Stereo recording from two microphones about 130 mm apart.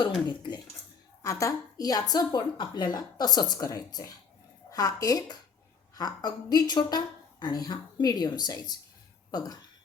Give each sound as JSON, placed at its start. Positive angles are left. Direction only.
{"t": 0.0, "sound": "a woman's voice", "side_deg": 35}
{"t": 1.2, "sound": "a woman's voice", "side_deg": 25}